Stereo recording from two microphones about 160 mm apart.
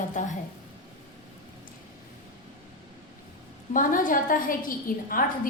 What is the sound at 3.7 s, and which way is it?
A woman's voice, 55° left (ahead or behind).